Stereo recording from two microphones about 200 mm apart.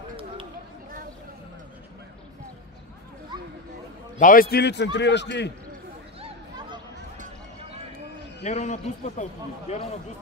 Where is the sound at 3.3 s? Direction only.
20° right (ahead or behind).